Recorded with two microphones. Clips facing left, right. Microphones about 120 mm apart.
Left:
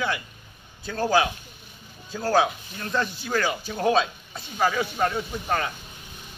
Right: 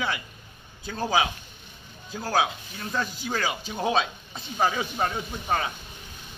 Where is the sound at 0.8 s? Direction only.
15° right (ahead or behind).